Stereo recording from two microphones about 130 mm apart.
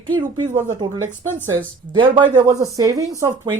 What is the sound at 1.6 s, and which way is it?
Speech, 40° right (ahead or behind).